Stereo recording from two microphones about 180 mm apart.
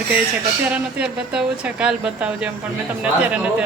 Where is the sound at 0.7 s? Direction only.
5° right (ahead or behind).